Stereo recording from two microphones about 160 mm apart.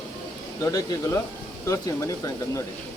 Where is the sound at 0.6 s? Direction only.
20° left (ahead or behind).